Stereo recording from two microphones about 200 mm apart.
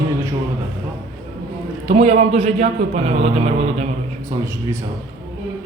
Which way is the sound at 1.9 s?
30° right (ahead or behind).